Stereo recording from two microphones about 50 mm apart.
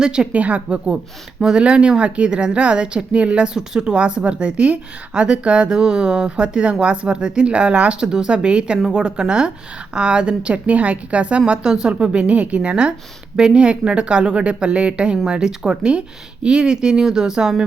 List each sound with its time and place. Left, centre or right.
0.0 s speech: centre
0.3 s a woman's voice: right
1.4 s a woman's voice: centre